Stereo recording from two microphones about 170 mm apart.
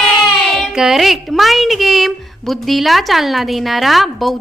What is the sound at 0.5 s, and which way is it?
A woman's voice, centre (ahead or behind).